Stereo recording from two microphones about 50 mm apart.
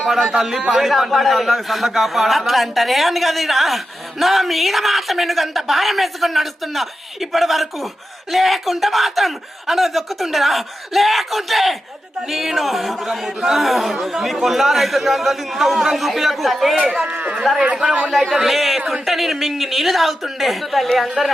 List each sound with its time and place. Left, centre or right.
0.1 s a man's voice: centre
17.1 s speech: right
17.3 s a man's voice: centre
18.1 s speech: centre